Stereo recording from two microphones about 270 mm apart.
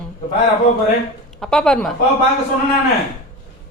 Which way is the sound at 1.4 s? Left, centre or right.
Centre.